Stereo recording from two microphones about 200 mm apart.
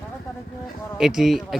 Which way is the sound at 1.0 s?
Centre (ahead or behind).